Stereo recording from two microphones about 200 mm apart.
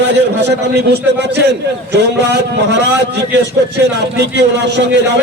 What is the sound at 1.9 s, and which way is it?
A man's voice, 60° right (ahead or behind).